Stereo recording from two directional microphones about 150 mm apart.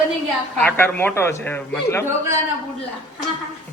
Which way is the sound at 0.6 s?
10° left (ahead or behind).